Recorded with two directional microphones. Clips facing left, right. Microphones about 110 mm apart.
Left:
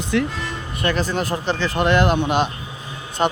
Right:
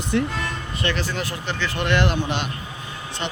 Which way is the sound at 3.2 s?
45° left (ahead or behind).